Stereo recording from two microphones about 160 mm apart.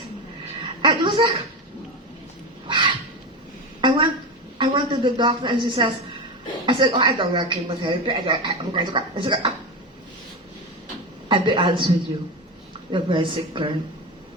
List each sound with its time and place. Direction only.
0.8 s a woman's voice: 30° right (ahead or behind)
2.6 s a sound: 30° right (ahead or behind)
4.5 s a woman's voice: 30° right (ahead or behind)
11.3 s a woman's voice: 30° right (ahead or behind)
12.9 s a woman's voice: 30° right (ahead or behind)